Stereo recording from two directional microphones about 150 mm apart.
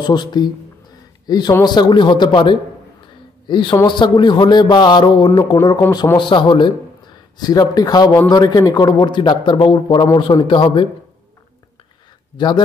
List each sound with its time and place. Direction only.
0.0 s a man's voice: 30° left (ahead or behind)
5.8 s a man's voice: 20° left (ahead or behind)
12.4 s a man's voice: 30° left (ahead or behind)